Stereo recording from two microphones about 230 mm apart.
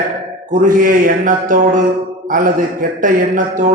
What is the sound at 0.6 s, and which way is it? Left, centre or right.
A man's voice, right.